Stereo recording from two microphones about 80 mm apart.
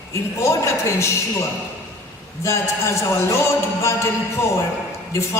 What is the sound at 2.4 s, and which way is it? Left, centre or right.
Speech, left.